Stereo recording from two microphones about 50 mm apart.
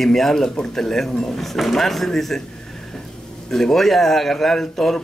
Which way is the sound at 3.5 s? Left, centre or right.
Centre.